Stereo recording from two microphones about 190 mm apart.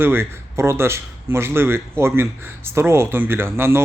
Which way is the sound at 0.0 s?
10° right (ahead or behind).